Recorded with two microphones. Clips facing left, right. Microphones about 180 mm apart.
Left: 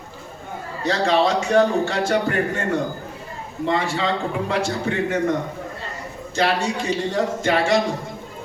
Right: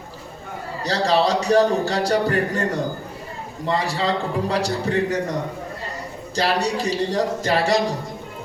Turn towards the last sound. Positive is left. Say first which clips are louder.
# even
turn(degrees=-35)  # may be behind; listen again after turning